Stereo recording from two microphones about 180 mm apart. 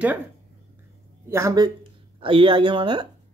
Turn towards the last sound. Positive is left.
turn(degrees=-25)  # may be behind; listen again after turning